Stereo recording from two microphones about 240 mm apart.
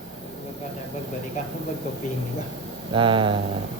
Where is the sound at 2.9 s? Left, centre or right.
Right.